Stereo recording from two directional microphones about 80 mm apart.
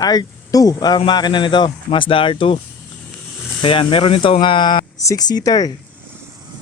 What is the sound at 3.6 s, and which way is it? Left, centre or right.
Speech, left.